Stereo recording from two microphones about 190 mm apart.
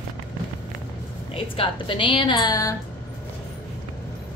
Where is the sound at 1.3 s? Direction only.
30° left (ahead or behind).